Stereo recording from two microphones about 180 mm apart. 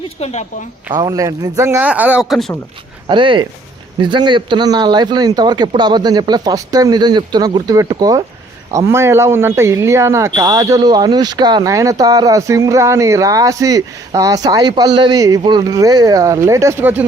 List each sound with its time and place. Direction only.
0.2 s speech: 40° left (ahead or behind)
0.9 s speech: 20° right (ahead or behind); by 2.5 s 5° right (ahead or behind)
3.1 s speech: 25° right (ahead or behind)